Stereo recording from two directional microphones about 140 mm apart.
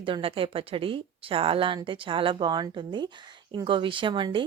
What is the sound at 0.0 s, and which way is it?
A woman's voice, 40° right (ahead or behind).